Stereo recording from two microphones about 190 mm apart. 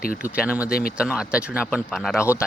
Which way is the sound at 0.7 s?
50° left (ahead or behind).